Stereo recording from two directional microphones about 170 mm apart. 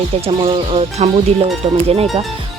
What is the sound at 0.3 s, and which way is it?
Speech, 35° right (ahead or behind).